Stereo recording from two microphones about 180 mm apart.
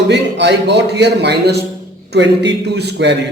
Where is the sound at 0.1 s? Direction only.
70° right (ahead or behind).